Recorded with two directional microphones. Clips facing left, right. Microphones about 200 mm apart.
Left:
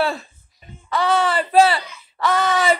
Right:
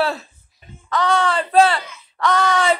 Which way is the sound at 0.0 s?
Centre (ahead or behind).